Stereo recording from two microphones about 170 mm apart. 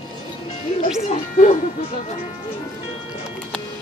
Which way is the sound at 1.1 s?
50° left (ahead or behind).